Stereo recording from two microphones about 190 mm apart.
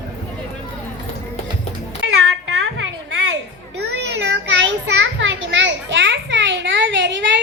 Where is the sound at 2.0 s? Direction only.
90° right.